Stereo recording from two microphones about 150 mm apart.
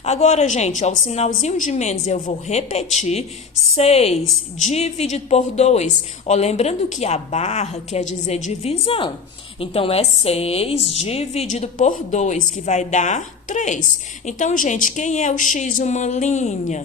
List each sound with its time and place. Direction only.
0.0 s a woman's voice: 50° left (ahead or behind)